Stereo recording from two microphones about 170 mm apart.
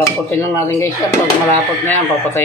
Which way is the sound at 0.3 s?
15° left (ahead or behind).